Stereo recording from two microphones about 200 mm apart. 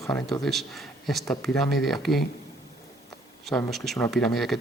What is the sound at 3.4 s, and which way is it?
Speech, centre (ahead or behind).